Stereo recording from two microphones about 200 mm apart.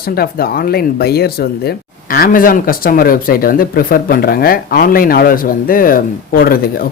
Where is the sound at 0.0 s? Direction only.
50° left (ahead or behind).